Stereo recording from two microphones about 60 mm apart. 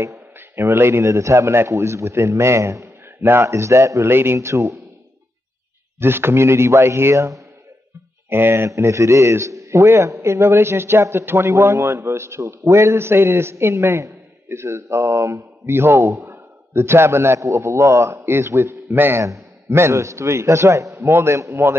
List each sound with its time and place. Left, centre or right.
0.4 s speech: right
1.0 s a man's voice: right
1.7 s a man's voice: right
4.1 s a man's voice: right
5.9 s a man's voice: right
8.3 s speech: right
8.6 s a man's voice: right
19.2 s a man's voice: right